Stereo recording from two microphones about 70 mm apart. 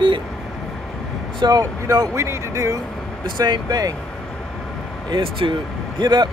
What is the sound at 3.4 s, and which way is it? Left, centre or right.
Speech, right.